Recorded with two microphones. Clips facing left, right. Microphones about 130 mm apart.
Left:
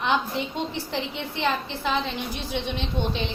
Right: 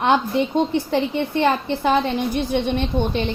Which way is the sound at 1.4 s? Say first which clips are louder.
Right 5 dB; 50° right (ahead or behind).